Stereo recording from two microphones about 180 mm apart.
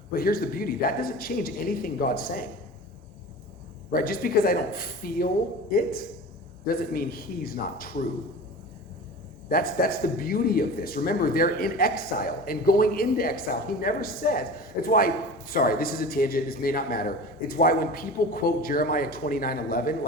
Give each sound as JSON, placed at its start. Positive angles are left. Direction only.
{"t": 0.1, "sound": "a man's voice", "side_deg": 55}
{"t": 3.9, "sound": "a man's voice", "side_deg": 55}
{"t": 9.5, "sound": "a man's voice", "side_deg": 55}